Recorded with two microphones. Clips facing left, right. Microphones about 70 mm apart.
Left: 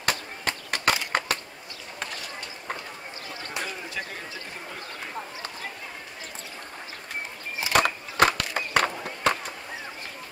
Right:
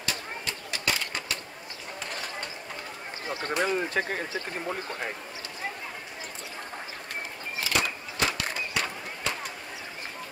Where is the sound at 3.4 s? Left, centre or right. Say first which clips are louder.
Right 8 dB; right.